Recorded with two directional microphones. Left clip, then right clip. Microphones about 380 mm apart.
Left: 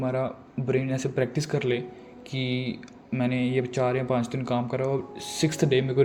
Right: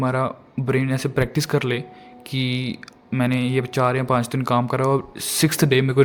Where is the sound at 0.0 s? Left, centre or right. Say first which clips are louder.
Right 6 dB; right.